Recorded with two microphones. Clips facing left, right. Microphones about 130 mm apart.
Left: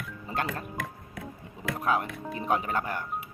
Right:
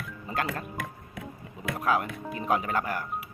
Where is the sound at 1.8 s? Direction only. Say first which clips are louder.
Right 1 dB; 30° left (ahead or behind).